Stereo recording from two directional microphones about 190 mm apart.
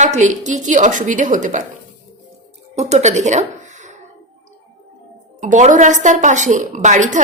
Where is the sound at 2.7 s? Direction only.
35° right (ahead or behind).